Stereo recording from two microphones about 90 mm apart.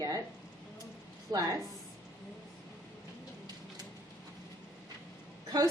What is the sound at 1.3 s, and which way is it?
Speech, 45° right (ahead or behind).